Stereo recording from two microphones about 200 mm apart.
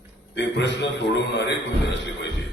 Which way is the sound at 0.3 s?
60° left (ahead or behind).